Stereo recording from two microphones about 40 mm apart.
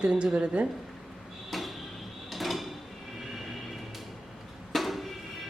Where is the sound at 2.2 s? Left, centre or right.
Centre.